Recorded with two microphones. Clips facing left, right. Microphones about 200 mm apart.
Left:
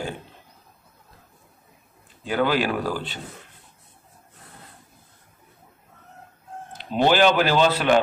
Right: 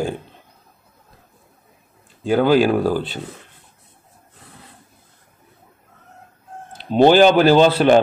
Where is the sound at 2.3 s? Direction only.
35° right (ahead or behind).